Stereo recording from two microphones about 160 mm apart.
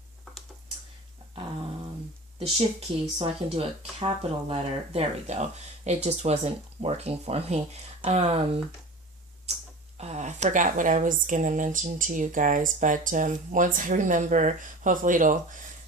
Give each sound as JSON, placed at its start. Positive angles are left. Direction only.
{"t": 3.2, "sound": "speech", "side_deg": -35}
{"t": 9.5, "sound": "tick-tock", "side_deg": -40}
{"t": 10.0, "sound": "speech", "side_deg": -45}